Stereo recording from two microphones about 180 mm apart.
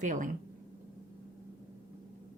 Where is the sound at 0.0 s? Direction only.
45° right (ahead or behind).